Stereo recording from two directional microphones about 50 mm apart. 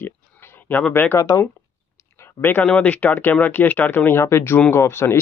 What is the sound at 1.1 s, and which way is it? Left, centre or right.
Speech, left.